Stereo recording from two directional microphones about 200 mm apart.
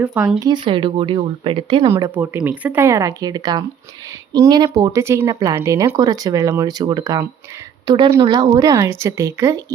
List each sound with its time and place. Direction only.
0.0 s speech: 5° right (ahead or behind)
0.3 s speech: 20° right (ahead or behind)
1.9 s speech: 10° right (ahead or behind)